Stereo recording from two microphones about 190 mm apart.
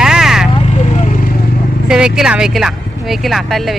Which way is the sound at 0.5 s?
40° left (ahead or behind).